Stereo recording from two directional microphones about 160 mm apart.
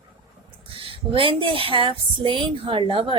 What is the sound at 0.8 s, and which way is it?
A woman's voice, 35° right (ahead or behind).